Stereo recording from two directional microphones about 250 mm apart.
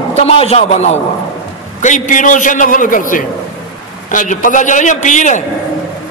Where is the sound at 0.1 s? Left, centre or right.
Left.